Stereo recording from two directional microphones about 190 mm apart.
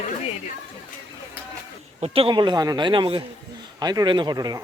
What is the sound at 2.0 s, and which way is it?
Speech, 30° right (ahead or behind).